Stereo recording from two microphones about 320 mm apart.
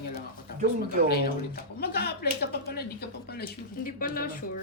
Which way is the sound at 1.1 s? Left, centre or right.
Left.